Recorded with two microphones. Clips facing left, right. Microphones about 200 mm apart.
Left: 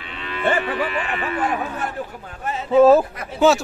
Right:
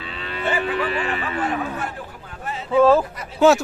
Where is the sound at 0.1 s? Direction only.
35° right (ahead or behind).